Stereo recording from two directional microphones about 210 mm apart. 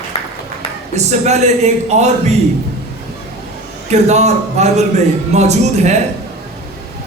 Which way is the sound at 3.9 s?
35° right (ahead or behind).